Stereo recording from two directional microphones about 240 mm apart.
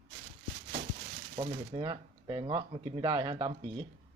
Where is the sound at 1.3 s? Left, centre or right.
Right.